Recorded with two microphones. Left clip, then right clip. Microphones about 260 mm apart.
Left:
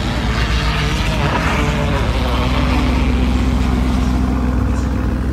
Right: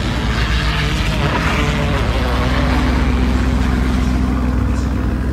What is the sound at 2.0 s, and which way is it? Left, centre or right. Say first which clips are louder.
Vehicle: even; left.